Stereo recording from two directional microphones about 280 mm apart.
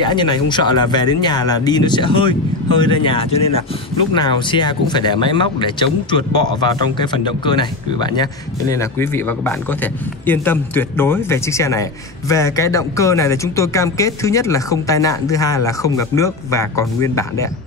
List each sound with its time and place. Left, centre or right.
0.0 s speech: centre